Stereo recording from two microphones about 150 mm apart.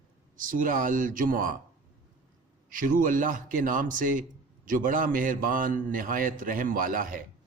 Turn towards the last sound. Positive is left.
turn(degrees=-65)  # may be behind; listen again after turning